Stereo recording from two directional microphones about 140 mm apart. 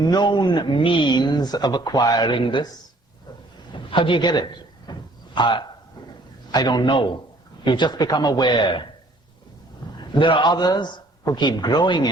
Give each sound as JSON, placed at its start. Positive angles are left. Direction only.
{"t": 0.0, "sound": "speech", "side_deg": 30}
{"t": 3.7, "sound": "a sound", "side_deg": 35}
{"t": 6.5, "sound": "speech", "side_deg": 30}
{"t": 10.1, "sound": "speech", "side_deg": 35}